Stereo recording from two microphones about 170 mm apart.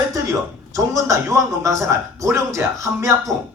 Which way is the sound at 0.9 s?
20° right (ahead or behind).